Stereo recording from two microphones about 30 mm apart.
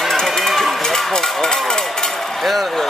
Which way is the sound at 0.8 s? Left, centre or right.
Centre.